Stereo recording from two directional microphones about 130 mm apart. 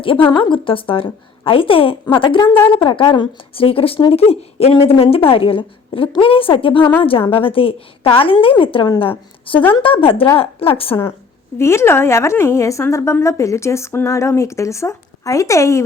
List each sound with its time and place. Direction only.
0.0 s speech: 40° left (ahead or behind)
11.5 s a woman's voice: 20° left (ahead or behind)